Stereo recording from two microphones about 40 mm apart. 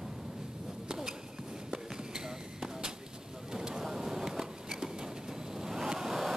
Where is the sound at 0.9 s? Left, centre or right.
Centre.